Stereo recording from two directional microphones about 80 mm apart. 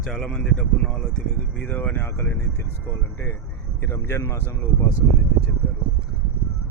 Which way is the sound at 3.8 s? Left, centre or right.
Left.